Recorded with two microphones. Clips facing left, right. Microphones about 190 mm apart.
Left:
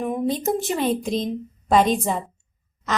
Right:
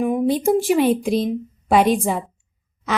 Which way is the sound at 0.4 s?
15° right (ahead or behind).